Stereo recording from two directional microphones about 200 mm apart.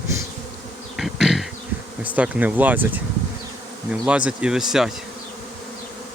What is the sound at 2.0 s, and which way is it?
Speech, 5° right (ahead or behind).